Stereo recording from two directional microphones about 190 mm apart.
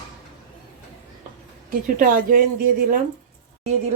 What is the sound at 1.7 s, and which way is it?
Speech, 45° right (ahead or behind).